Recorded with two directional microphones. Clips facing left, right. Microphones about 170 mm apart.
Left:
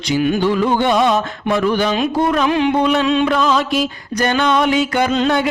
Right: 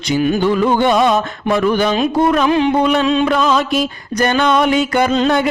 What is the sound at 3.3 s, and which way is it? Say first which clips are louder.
Music: right 1 dB; 50° right (ahead or behind).